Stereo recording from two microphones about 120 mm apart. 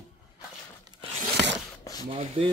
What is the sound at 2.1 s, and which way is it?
Speech, 50° right (ahead or behind).